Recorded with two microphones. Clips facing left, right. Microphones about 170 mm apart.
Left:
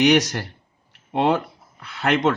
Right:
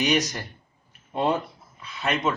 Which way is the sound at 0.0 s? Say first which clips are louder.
Left 7 dB; 75° left (ahead or behind).